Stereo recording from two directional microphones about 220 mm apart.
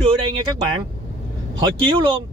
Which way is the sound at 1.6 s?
20° right (ahead or behind).